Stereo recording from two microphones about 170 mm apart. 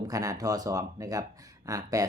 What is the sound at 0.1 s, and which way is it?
Speech, 20° right (ahead or behind).